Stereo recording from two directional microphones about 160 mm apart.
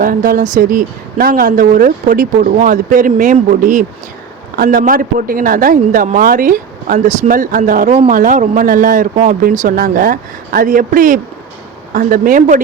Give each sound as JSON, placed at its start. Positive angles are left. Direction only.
{"t": 0.0, "sound": "a man's voice", "side_deg": -60}